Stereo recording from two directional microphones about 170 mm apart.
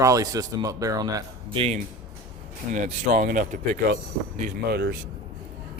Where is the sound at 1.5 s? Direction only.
35° right (ahead or behind).